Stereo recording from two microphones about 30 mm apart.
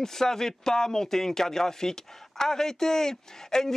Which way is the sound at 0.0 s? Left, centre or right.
Centre.